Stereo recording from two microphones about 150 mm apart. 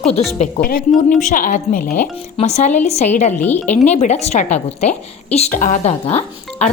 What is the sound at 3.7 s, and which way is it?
A woman's voice, 50° left (ahead or behind).